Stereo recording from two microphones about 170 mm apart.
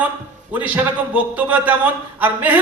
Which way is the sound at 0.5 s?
10° right (ahead or behind).